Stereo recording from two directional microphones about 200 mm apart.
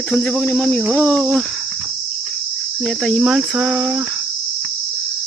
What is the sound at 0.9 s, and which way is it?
Cricket, 5° left (ahead or behind).